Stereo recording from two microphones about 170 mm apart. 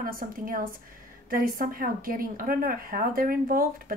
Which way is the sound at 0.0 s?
55° right (ahead or behind).